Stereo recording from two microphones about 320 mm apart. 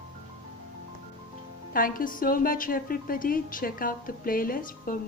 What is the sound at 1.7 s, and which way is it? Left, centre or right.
A woman's voice, left.